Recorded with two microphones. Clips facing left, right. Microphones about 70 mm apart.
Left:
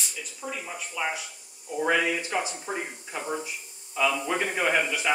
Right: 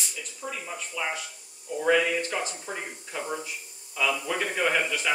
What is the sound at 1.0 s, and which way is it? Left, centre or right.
Speech, centre.